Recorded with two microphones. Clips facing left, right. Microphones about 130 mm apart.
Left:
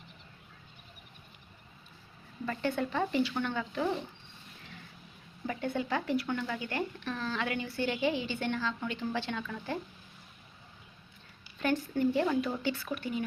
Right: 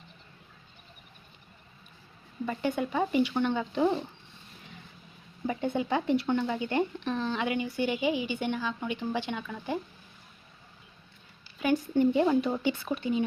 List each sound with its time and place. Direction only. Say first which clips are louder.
2.5 s speech: right 2 dB; 15° right (ahead or behind)
5.5 s speech: right 4 dB; 20° right (ahead or behind)
11.9 s speech: right 6 dB; 20° right (ahead or behind)